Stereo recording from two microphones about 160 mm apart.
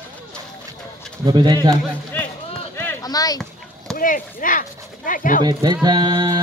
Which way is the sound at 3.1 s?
25° left (ahead or behind).